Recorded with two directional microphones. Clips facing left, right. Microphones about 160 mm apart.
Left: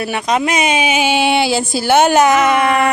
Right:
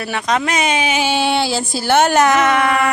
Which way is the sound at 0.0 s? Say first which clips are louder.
Left 2 dB; 15° left (ahead or behind).